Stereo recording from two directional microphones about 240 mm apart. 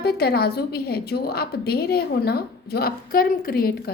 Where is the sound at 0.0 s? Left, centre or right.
Left.